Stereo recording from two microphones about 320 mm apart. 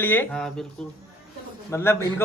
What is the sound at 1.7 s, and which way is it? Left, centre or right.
Speech, centre.